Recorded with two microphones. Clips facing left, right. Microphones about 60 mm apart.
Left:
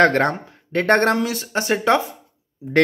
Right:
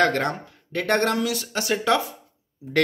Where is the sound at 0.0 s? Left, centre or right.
Left.